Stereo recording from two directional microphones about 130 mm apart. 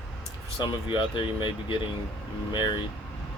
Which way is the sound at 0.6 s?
40° left (ahead or behind).